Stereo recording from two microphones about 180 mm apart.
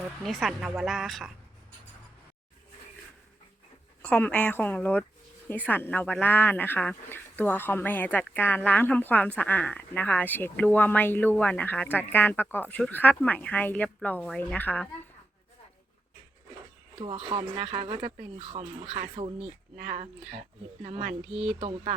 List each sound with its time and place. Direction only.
0.2 s a woman's voice: centre (ahead or behind)
4.0 s speech: 5° left (ahead or behind)
17.0 s speech: 30° right (ahead or behind)
19.7 s speech: 45° right (ahead or behind)
20.8 s speech: 35° right (ahead or behind)